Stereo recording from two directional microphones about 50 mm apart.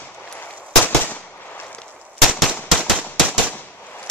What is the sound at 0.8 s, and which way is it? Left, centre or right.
Fireworks, left.